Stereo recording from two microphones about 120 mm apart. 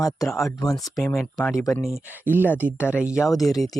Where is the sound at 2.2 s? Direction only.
15° right (ahead or behind).